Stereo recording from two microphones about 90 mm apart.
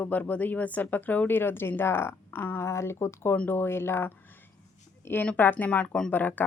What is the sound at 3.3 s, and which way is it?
Speech, 20° left (ahead or behind).